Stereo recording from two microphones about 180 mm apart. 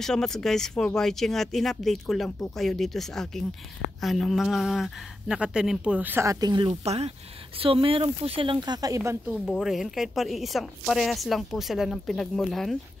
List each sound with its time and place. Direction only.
0.0 s speech: 5° left (ahead or behind); by 6.7 s 25° right (ahead or behind)
6.7 s speech: 35° right (ahead or behind); by 9.2 s 15° right (ahead or behind)
9.3 s speech: centre (ahead or behind)